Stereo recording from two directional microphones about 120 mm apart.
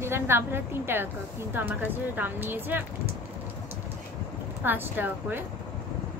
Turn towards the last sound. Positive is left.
turn(degrees=-15)  # may be behind; listen again after turning